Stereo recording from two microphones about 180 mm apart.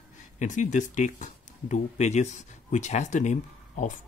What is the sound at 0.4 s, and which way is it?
Speech, 45° left (ahead or behind).